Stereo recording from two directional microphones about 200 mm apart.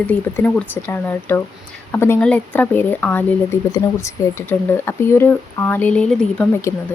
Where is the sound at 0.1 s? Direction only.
5° left (ahead or behind).